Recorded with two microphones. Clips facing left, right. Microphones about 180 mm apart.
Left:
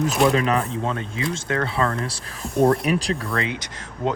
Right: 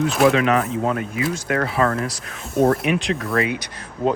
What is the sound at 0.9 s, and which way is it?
Speech, 25° left (ahead or behind).